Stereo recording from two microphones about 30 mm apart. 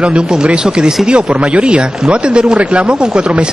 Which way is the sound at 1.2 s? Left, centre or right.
Right.